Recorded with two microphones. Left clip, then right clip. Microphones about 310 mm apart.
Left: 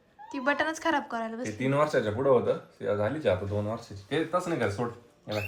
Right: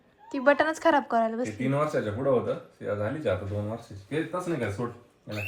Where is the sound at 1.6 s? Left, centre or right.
Left.